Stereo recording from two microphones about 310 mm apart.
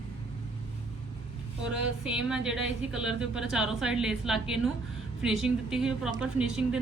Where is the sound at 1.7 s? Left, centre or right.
Centre.